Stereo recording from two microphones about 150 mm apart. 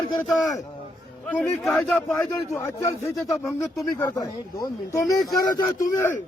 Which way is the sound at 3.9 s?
20° left (ahead or behind).